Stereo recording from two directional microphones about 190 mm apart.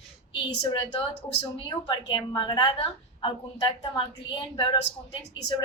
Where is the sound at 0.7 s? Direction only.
25° left (ahead or behind).